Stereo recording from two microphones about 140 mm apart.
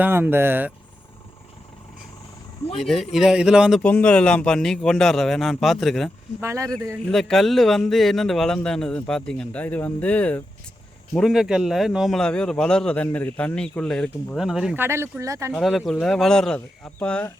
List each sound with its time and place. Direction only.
0.0 s speech: 15° right (ahead or behind)
2.8 s speech: centre (ahead or behind)
3.8 s speech: 10° left (ahead or behind)
6.4 s speech: 20° right (ahead or behind)
7.0 s speech: 5° left (ahead or behind)
11.2 s speech: centre (ahead or behind)
14.8 s speech: 20° right (ahead or behind)
15.5 s speech: centre (ahead or behind)